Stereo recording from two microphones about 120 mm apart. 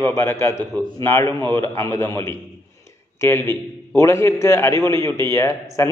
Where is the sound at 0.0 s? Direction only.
20° left (ahead or behind).